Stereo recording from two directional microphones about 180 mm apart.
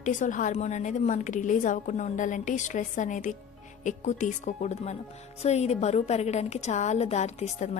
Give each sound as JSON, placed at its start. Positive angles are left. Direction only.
{"t": 0.0, "sound": "a woman's voice", "side_deg": 45}